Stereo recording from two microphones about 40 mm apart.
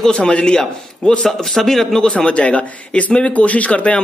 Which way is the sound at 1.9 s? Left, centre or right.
Left.